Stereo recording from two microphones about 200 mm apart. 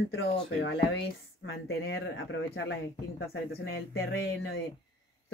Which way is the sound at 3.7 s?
75° left (ahead or behind).